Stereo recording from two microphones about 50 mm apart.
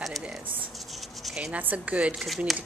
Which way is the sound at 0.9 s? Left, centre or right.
Centre.